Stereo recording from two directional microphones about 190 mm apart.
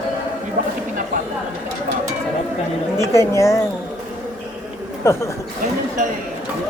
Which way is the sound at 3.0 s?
15° left (ahead or behind).